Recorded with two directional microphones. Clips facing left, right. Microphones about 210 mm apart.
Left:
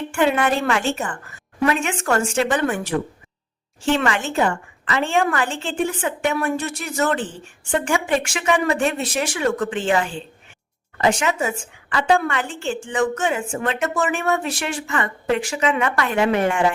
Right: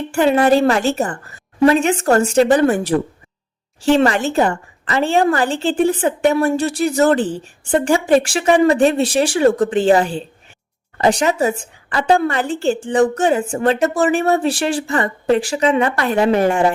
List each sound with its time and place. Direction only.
0.1 s a woman's voice: 35° right (ahead or behind)